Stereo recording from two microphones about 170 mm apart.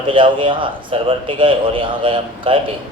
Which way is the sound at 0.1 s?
30° right (ahead or behind).